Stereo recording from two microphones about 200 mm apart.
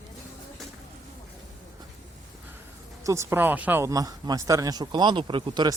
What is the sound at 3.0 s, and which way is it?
Speech, 15° right (ahead or behind).